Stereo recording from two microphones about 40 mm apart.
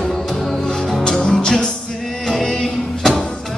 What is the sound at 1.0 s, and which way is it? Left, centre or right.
Music, left.